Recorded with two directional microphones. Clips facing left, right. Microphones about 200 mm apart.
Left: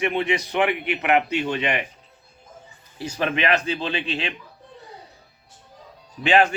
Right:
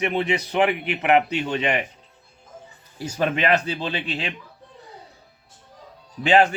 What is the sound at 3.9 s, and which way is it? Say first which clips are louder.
Speech: left 1 dB; 35° right (ahead or behind).